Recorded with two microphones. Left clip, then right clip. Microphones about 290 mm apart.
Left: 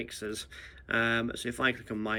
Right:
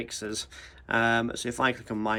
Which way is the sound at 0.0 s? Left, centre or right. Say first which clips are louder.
Right 3 dB; centre.